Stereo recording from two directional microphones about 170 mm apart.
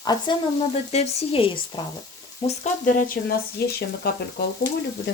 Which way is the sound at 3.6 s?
70° left (ahead or behind).